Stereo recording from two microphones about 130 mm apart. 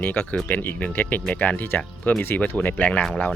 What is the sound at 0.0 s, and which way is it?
Speech, 15° left (ahead or behind).